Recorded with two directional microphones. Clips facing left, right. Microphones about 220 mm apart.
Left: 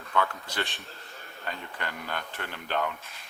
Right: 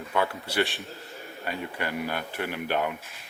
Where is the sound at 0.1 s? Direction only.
10° right (ahead or behind).